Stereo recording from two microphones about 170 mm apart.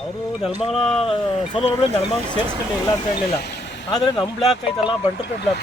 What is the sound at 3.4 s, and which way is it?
Vehicle, 90° left.